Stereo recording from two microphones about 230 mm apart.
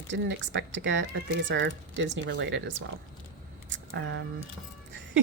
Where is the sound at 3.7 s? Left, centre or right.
Right.